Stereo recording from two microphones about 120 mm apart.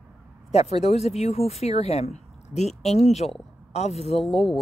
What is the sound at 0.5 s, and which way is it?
Speech, 60° left (ahead or behind).